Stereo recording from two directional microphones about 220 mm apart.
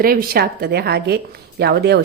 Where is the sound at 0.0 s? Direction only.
40° right (ahead or behind).